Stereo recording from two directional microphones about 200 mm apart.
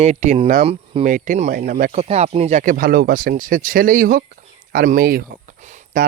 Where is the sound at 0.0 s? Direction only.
35° right (ahead or behind).